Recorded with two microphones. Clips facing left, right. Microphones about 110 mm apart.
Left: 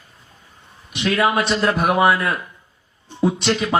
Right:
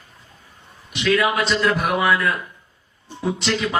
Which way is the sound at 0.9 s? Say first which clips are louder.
Left 1 dB; 25° left (ahead or behind).